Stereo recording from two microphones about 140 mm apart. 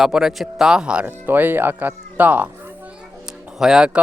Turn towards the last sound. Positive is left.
turn(degrees=-5)  # may be behind; listen again after turning